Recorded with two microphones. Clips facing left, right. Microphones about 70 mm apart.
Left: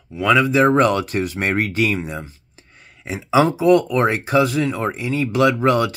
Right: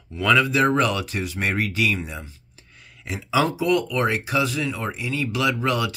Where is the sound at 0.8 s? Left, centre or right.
Left.